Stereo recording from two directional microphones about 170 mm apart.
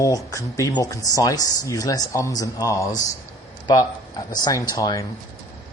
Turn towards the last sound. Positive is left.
turn(degrees=20)  # may be behind; listen again after turning